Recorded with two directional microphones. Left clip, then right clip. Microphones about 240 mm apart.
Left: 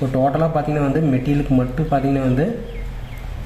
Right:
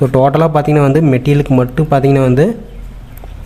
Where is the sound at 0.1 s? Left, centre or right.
Right.